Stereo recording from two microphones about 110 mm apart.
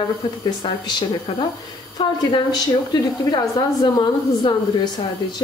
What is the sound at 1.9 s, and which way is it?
A woman's voice, 40° left (ahead or behind).